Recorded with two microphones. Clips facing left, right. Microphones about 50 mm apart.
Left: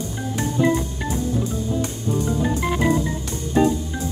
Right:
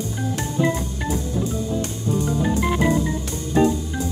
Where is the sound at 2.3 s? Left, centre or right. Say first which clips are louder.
Right 1 dB; centre.